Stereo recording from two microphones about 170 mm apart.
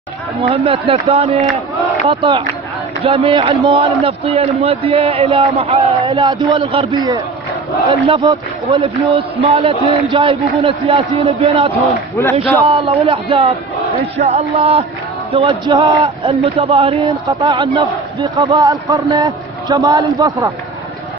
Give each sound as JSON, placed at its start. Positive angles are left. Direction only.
{"t": 0.4, "sound": "a man's voice", "side_deg": -35}